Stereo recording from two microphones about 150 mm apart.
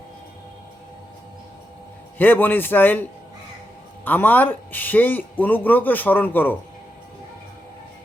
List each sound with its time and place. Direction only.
2.1 s speech: 10° left (ahead or behind)
4.0 s speech: 10° left (ahead or behind)